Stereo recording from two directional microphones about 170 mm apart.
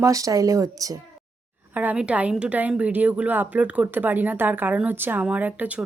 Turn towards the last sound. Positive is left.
turn(degrees=-10)  # may be behind; listen again after turning